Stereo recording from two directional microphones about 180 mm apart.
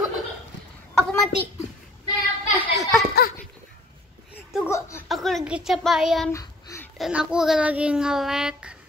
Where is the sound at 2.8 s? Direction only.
5° left (ahead or behind).